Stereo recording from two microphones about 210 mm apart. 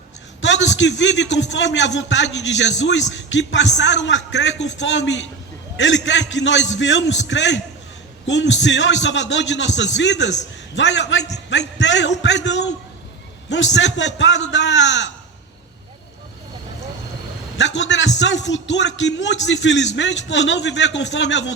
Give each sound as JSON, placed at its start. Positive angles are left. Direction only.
{"t": 0.4, "sound": "a man's voice", "side_deg": 60}
{"t": 13.7, "sound": "a man's voice", "side_deg": 60}
{"t": 17.6, "sound": "a man's voice", "side_deg": 60}